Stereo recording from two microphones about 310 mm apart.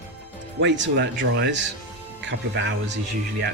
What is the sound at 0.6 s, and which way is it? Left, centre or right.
Speech, right.